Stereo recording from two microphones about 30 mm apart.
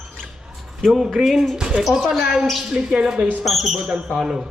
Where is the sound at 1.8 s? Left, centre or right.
Centre.